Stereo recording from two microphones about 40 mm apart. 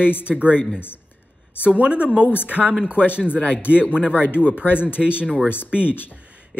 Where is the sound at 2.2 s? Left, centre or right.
Left.